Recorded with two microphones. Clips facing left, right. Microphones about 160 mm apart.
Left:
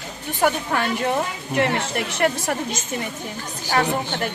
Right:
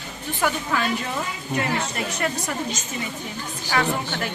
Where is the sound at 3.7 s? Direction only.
40° left (ahead or behind).